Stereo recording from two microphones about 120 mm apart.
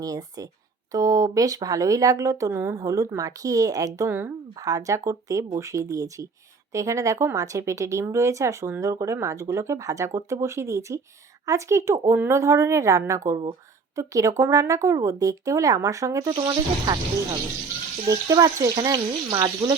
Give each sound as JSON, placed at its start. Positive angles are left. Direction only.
{"t": 0.0, "sound": "speech", "side_deg": -30}
{"t": 18.1, "sound": "speech", "side_deg": -30}